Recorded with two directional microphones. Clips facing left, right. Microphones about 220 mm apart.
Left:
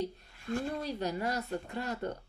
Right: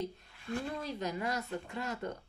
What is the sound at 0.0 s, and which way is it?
A woman's voice, 40° left (ahead or behind).